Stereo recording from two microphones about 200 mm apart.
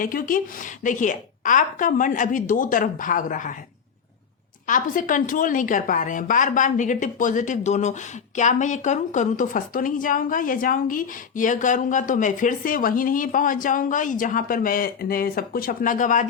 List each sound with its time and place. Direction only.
0.0 s a woman's voice: 45° left (ahead or behind)
4.6 s a woman's voice: 40° left (ahead or behind)